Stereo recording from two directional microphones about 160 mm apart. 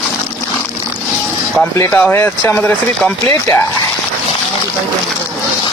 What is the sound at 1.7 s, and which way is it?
Speech, 15° left (ahead or behind).